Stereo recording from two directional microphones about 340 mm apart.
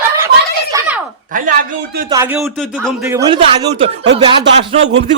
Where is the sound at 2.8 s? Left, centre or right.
Centre.